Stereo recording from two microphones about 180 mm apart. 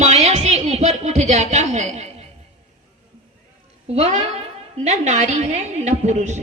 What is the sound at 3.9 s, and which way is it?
Speech, 40° right (ahead or behind).